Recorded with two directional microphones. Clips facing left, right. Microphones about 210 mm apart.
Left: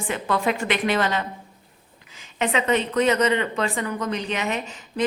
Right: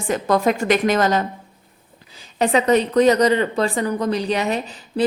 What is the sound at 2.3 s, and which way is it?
A woman's voice, 40° right (ahead or behind).